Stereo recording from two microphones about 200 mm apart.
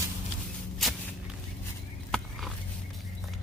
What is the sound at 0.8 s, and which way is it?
Walk, centre (ahead or behind).